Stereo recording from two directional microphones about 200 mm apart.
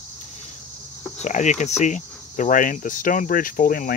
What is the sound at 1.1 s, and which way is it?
Speech, 35° left (ahead or behind).